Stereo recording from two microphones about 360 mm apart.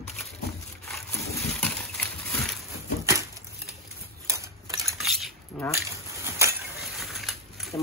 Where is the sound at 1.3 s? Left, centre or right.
Centre.